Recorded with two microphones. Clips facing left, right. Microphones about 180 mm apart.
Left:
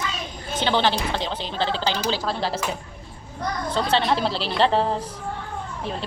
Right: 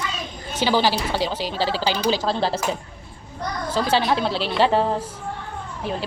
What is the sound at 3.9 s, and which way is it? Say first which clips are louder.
Speech: right 1 dB; 5° right (ahead or behind).